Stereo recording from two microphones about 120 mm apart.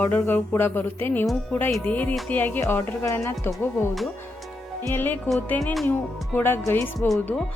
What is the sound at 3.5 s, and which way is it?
Speech, centre (ahead or behind).